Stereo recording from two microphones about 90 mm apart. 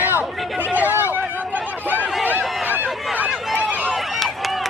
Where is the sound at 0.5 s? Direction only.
20° right (ahead or behind).